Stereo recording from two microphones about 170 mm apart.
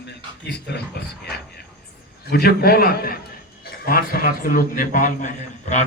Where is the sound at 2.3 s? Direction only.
65° left (ahead or behind).